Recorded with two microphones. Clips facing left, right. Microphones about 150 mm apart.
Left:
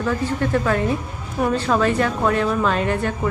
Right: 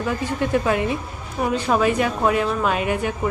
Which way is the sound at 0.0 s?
15° right (ahead or behind).